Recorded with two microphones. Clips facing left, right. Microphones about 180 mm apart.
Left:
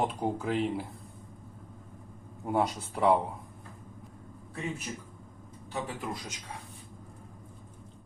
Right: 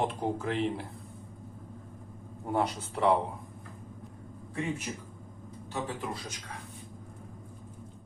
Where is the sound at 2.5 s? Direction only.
10° left (ahead or behind).